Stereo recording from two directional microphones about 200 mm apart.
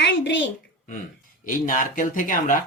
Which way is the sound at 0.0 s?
65° left (ahead or behind).